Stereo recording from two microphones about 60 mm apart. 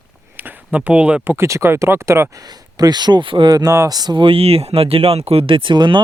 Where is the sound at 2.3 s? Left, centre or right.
Right.